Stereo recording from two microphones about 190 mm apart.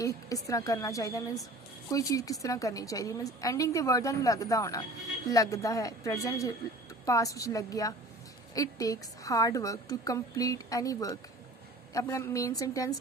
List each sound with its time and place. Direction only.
0.0 s a woman's voice: 15° left (ahead or behind)